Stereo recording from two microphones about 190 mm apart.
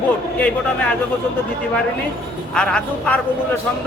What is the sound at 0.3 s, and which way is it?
Speech, 10° left (ahead or behind).